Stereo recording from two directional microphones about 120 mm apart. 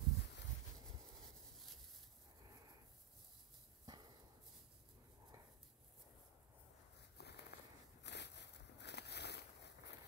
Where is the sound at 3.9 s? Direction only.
35° right (ahead or behind).